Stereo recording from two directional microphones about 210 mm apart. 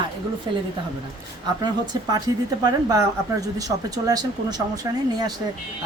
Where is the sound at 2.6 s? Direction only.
20° right (ahead or behind).